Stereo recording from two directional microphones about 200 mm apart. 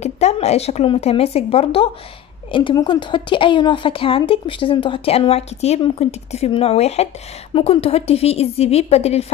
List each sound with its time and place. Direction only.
0.0 s a woman's voice: 35° left (ahead or behind)